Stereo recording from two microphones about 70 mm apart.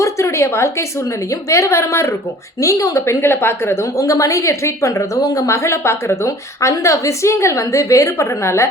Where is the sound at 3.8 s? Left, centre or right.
Left.